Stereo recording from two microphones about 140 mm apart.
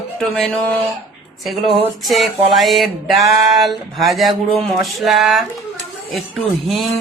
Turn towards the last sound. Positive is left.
turn(degrees=0)  # may be behind; listen again after turning